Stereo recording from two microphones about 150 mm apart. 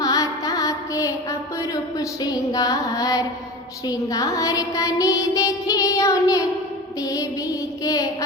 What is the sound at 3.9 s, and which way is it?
Child singing, 25° left (ahead or behind).